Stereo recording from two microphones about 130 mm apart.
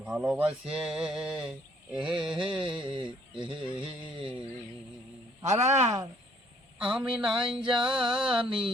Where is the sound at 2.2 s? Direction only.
5° right (ahead or behind).